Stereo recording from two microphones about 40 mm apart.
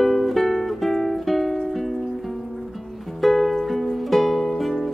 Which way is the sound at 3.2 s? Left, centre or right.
Centre.